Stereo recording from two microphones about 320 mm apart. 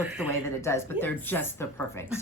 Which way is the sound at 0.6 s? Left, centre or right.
Centre.